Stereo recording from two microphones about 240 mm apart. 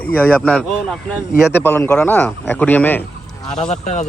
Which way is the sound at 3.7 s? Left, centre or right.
Left.